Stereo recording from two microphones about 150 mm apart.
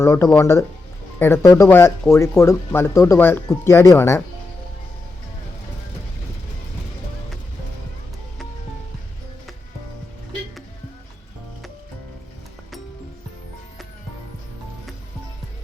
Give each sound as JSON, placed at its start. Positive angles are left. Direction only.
{"t": 0.0, "sound": "speech", "side_deg": 15}